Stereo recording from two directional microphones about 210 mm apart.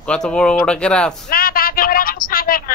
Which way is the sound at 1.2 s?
45° left (ahead or behind).